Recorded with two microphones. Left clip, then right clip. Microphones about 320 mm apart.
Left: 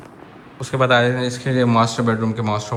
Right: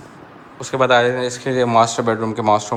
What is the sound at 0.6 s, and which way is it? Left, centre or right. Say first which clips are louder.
A man's voice: right 2 dB; centre.